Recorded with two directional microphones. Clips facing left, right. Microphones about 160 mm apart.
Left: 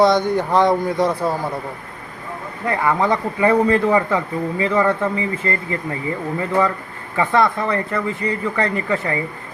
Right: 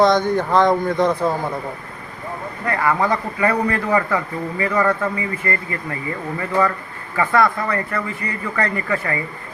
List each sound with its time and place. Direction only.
0.0 s speech: 10° left (ahead or behind)
2.6 s a man's voice: 20° left (ahead or behind)